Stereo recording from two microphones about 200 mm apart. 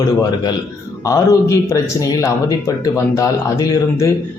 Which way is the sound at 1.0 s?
15° left (ahead or behind).